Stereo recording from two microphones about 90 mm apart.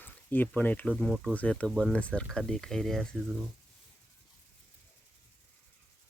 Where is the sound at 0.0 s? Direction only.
20° left (ahead or behind).